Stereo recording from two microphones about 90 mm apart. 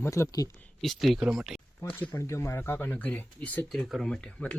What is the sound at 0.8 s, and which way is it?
Speech, centre (ahead or behind).